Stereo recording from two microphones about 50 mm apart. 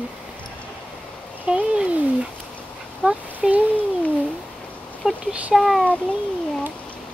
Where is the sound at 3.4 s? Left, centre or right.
Centre.